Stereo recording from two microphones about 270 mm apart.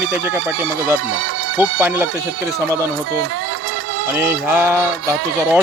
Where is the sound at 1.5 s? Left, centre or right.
Centre.